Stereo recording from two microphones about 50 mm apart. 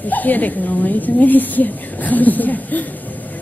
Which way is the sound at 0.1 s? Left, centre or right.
Left.